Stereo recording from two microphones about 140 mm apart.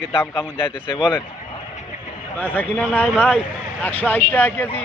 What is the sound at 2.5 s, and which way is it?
Speech, 15° left (ahead or behind).